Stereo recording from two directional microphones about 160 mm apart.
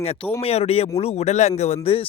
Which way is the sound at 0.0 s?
40° left (ahead or behind).